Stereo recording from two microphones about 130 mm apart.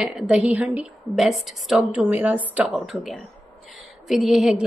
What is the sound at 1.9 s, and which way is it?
A woman's voice, 10° right (ahead or behind).